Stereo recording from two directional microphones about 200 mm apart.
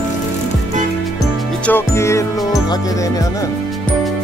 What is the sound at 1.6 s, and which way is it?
Music, 10° left (ahead or behind).